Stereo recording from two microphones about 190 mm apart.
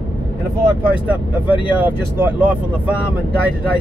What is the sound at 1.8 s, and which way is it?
Speech, 10° right (ahead or behind).